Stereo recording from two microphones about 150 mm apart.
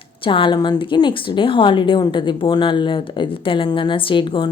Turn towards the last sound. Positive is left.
turn(degrees=35)  # may be behind; listen again after turning